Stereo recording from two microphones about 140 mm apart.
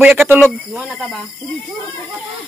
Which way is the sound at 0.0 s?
15° right (ahead or behind).